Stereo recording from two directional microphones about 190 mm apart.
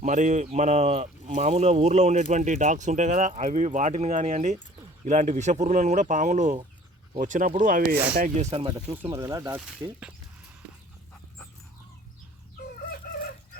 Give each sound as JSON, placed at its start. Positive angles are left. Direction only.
{"t": 0.0, "sound": "speech", "side_deg": -40}
{"t": 8.2, "sound": "speech", "side_deg": -35}
{"t": 9.0, "sound": "speech", "side_deg": -15}